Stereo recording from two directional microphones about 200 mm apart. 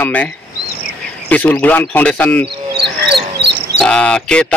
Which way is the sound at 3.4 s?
60° right (ahead or behind).